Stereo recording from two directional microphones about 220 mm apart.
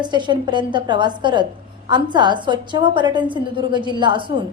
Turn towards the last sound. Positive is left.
turn(degrees=-20)  # may be behind; listen again after turning